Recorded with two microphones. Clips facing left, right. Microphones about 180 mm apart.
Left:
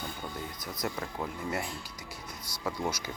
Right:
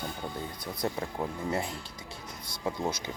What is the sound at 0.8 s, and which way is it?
Speech, 30° right (ahead or behind).